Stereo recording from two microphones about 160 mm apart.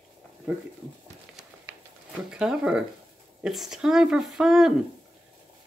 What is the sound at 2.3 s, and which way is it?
Speech, 5° right (ahead or behind).